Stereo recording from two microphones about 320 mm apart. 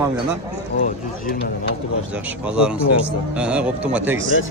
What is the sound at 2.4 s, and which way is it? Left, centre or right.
Speech, centre.